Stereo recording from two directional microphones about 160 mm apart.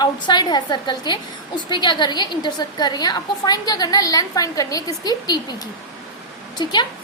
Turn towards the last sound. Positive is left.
turn(degrees=25)  # may be behind; listen again after turning